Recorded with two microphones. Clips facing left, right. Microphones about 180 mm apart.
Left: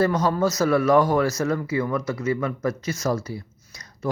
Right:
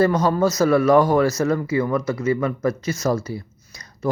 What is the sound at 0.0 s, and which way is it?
Speech, 35° right (ahead or behind).